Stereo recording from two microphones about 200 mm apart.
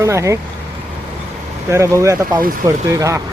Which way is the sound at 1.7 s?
15° right (ahead or behind).